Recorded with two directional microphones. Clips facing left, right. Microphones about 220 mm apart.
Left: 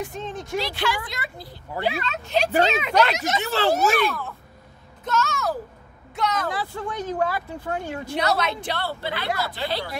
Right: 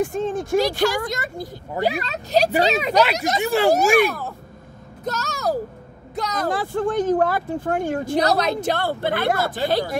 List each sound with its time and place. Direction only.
0.0 s speech: 50° right (ahead or behind)
3.4 s speech: 10° right (ahead or behind)
5.0 s a child's voice: 40° right (ahead or behind)